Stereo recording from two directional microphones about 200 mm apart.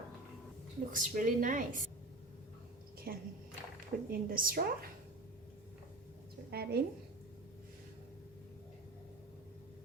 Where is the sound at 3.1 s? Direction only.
50° right (ahead or behind).